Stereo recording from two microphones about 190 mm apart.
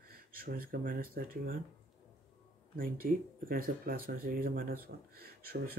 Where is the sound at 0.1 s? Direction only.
50° right (ahead or behind).